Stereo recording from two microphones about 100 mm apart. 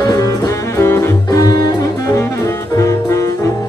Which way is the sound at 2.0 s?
30° left (ahead or behind).